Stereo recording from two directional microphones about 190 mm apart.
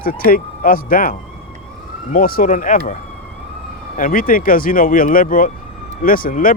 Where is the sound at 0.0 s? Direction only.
50° left (ahead or behind).